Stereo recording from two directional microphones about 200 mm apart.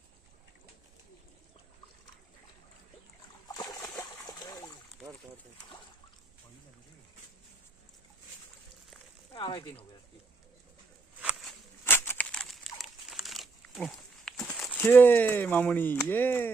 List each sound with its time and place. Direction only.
3.5 s splash: 20° left (ahead or behind)
9.3 s speech: 25° left (ahead or behind)
11.2 s a sound: 5° right (ahead or behind)
11.9 s crumpling: 10° left (ahead or behind)
14.8 s speech: 10° left (ahead or behind)